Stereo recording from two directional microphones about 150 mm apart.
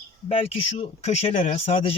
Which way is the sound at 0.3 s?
40° left (ahead or behind).